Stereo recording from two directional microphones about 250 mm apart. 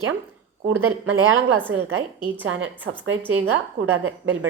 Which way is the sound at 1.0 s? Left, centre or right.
Right.